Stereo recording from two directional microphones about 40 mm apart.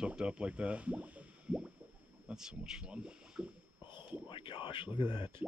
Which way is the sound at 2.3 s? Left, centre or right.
Centre.